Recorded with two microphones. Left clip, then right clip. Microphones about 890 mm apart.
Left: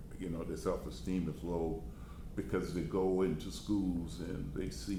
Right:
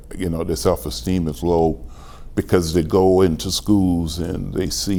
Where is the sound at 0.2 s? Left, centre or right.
Right.